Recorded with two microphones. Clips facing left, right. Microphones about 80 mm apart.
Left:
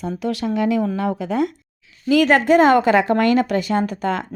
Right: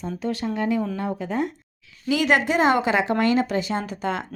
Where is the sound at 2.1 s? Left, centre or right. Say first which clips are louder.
Left 6 dB; left.